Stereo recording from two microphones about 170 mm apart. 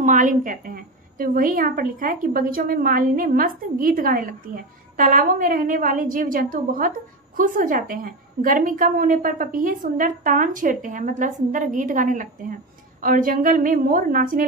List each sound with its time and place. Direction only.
0.0 s a woman's voice: 45° right (ahead or behind)